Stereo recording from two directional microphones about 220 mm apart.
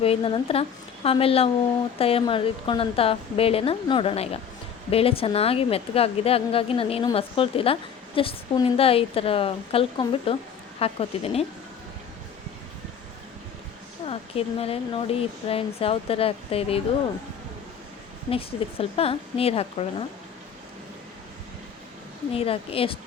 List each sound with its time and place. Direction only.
0.0 s a woman's voice: 25° left (ahead or behind)
14.1 s a woman's voice: 25° left (ahead or behind)
18.3 s a woman's voice: 25° left (ahead or behind)
22.3 s a woman's voice: 25° left (ahead or behind)